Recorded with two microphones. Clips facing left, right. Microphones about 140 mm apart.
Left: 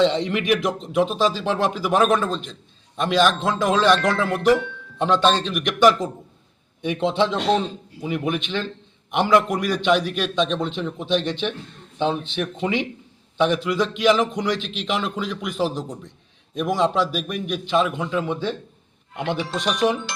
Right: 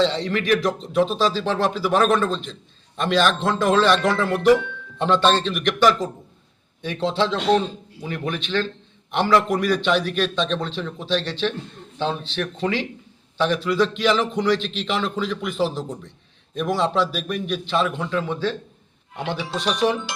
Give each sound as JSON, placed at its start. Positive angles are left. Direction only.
{"t": 0.0, "sound": "a man's voice", "side_deg": 15}
{"t": 19.5, "sound": "a man's voice", "side_deg": 15}